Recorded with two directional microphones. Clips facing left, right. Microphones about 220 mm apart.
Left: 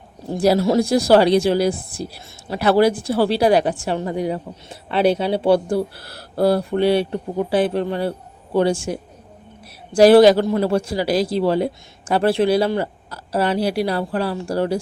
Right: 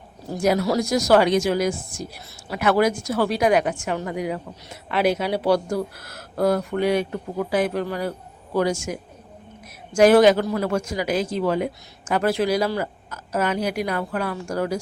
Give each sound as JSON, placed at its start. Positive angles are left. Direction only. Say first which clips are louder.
{"t": 0.3, "sound": "speech", "louder": "left 4 dB", "side_deg": 35}